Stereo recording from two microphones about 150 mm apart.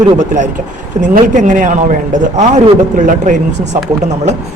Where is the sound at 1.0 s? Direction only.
60° right (ahead or behind).